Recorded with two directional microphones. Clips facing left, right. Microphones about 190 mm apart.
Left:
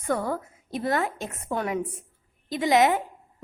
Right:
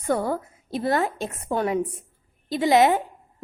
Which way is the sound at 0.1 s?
30° right (ahead or behind).